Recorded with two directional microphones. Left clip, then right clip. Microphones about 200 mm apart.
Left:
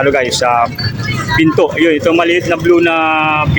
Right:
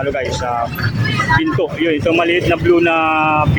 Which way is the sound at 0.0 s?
25° left (ahead or behind).